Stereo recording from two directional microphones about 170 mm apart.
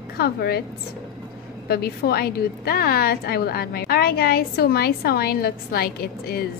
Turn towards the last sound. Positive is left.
turn(degrees=60)  # may be behind; listen again after turning